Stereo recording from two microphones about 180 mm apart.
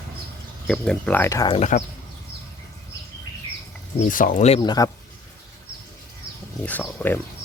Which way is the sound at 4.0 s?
50° left (ahead or behind).